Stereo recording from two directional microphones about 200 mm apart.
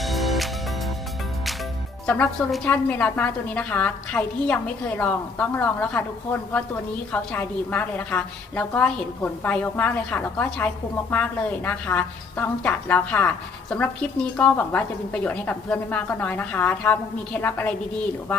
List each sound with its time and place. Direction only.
0.0 s music: centre (ahead or behind)
2.0 s a woman's voice: 5° left (ahead or behind)
7.1 s a woman's voice: 10° left (ahead or behind)